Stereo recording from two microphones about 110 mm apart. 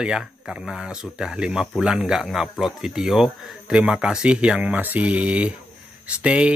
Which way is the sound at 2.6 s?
5° right (ahead or behind).